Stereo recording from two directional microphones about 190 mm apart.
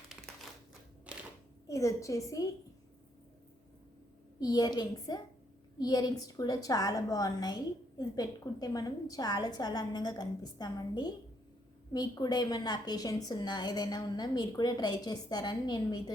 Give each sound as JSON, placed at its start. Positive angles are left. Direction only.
{"t": 1.1, "sound": "a sound", "side_deg": -5}
{"t": 1.6, "sound": "a woman's voice", "side_deg": 15}
{"t": 4.4, "sound": "a woman's voice", "side_deg": 20}